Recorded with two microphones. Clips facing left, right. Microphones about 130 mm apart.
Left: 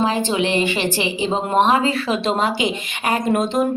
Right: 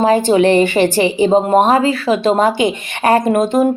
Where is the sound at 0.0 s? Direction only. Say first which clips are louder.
Right 8 dB; 45° right (ahead or behind).